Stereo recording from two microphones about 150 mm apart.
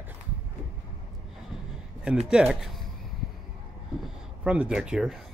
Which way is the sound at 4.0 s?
5° right (ahead or behind).